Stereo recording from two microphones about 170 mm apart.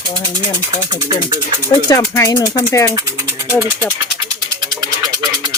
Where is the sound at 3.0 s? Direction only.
20° right (ahead or behind).